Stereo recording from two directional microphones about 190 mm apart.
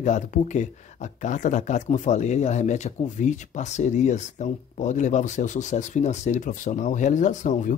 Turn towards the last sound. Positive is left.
turn(degrees=40)  # may be behind; listen again after turning